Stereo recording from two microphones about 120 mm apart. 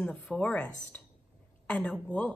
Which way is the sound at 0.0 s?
10° left (ahead or behind).